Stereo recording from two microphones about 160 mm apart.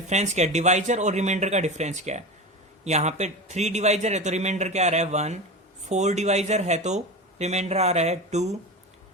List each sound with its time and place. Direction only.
0.1 s speech: 45° right (ahead or behind)